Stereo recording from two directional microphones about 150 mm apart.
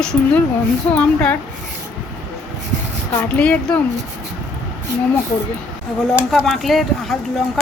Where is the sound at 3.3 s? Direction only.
10° left (ahead or behind).